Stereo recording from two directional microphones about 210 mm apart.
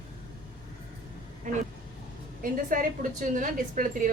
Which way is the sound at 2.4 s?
40° right (ahead or behind).